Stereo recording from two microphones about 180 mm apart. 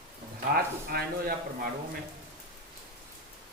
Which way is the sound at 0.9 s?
55° right (ahead or behind).